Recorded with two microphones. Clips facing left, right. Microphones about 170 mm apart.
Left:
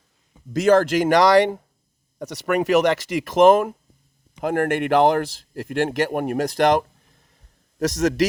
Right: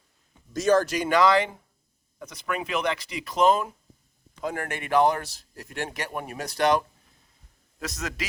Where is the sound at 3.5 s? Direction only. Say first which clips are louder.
Left 7 dB; 50° left (ahead or behind).